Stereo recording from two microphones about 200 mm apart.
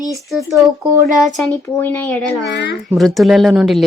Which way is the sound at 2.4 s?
60° left (ahead or behind).